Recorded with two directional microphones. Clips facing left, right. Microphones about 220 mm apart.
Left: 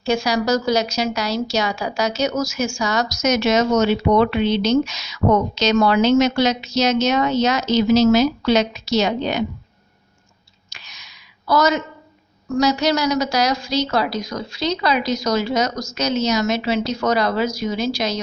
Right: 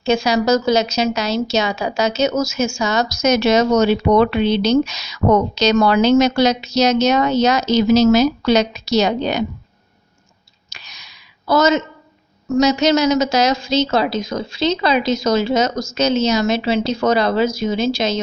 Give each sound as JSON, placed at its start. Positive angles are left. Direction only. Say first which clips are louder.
{"t": 0.0, "sound": "a woman's voice", "louder": "right 3 dB", "side_deg": -25}
{"t": 10.7, "sound": "a sound", "louder": "right 2 dB", "side_deg": -40}
{"t": 12.5, "sound": "a woman's voice", "louder": "right 4 dB", "side_deg": -20}